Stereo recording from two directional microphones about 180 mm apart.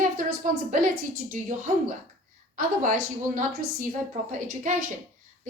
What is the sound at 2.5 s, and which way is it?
Speech, 45° right (ahead or behind).